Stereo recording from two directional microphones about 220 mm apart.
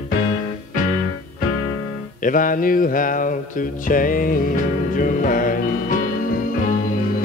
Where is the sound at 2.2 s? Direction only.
40° left (ahead or behind).